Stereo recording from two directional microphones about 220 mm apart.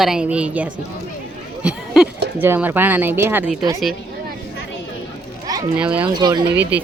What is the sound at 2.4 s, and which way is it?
Speech, 10° right (ahead or behind).